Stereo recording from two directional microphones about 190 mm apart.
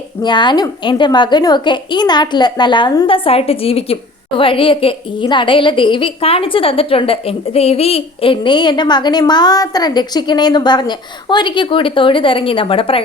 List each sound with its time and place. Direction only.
0.2 s a woman's voice: 25° left (ahead or behind)